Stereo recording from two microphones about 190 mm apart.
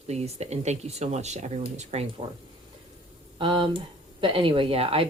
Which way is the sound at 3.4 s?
25° right (ahead or behind).